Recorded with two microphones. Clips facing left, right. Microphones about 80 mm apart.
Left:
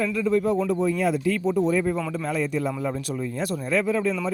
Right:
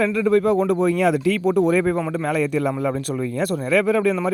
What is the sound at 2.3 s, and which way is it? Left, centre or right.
Speech, right.